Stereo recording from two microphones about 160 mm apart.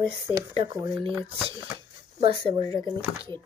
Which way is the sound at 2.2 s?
35° right (ahead or behind).